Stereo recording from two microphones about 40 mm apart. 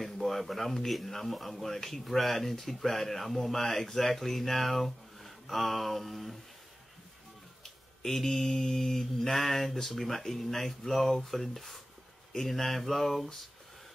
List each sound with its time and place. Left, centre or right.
0.0 s speech: centre
8.0 s speech: centre